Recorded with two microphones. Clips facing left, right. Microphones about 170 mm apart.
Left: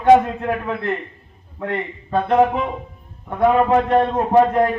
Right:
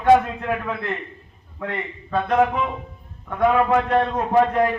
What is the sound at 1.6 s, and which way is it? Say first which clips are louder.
A man's voice: left 4 dB; 25° left (ahead or behind).